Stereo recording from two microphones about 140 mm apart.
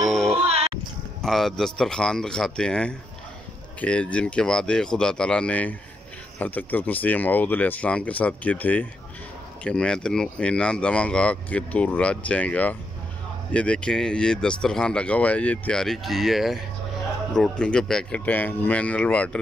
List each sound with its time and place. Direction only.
0.0 s music: centre (ahead or behind)
0.5 s music: 45° right (ahead or behind)
1.2 s speech: centre (ahead or behind)